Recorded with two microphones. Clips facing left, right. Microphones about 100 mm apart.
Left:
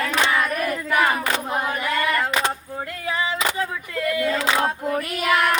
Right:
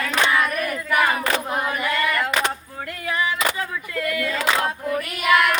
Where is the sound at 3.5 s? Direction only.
25° left (ahead or behind).